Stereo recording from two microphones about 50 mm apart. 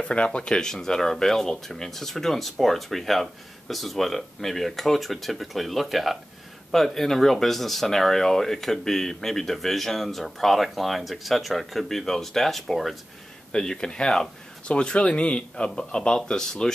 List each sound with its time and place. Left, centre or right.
0.0 s speech: left; by 12.9 s centre
13.5 s speech: centre
14.8 s a man's voice: left